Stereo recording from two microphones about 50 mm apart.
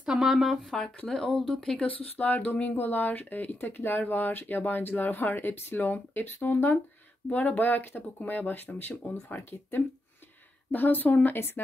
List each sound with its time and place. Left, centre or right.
0.0 s speech: centre
1.8 s speech: left
11.2 s speech: left